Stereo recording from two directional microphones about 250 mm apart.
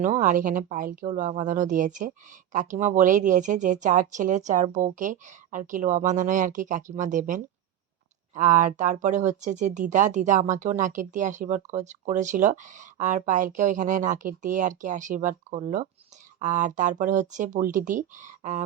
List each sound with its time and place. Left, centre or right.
0.0 s speech: right